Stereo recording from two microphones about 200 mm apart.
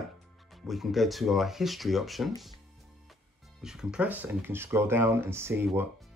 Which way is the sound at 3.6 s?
5° right (ahead or behind).